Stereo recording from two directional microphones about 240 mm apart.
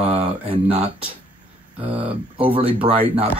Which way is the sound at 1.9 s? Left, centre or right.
Right.